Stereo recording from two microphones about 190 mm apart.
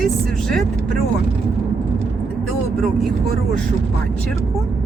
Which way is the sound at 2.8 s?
Centre (ahead or behind).